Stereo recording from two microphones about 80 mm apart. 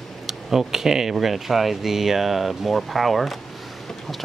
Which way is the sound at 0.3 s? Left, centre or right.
Centre.